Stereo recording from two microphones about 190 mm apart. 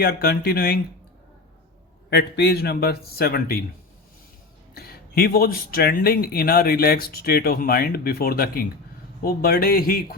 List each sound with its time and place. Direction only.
0.0 s speech: 55° left (ahead or behind)
2.0 s a man's voice: 60° left (ahead or behind)
4.7 s speech: 55° left (ahead or behind)